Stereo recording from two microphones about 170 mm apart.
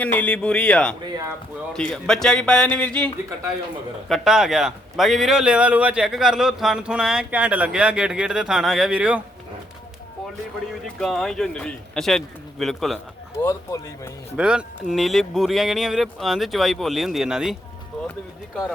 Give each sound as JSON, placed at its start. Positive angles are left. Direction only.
{"t": 0.0, "sound": "a man's voice", "side_deg": 10}
{"t": 4.1, "sound": "a man's voice", "side_deg": 0}
{"t": 11.0, "sound": "a man's voice", "side_deg": 0}
{"t": 13.4, "sound": "speech", "side_deg": 15}
{"t": 14.3, "sound": "a man's voice", "side_deg": -5}